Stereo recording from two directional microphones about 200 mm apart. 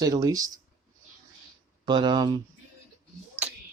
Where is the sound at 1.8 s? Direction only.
20° right (ahead or behind).